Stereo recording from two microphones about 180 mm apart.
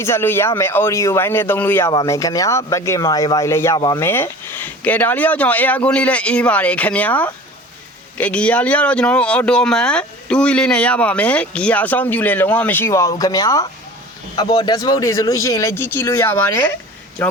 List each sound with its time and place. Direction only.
0.0 s speech: 15° left (ahead or behind)
1.9 s speech: 20° left (ahead or behind)